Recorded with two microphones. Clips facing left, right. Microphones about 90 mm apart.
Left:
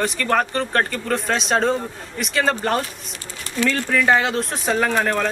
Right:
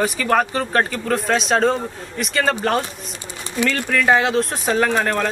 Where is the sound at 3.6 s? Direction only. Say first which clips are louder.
Even; 15° right (ahead or behind).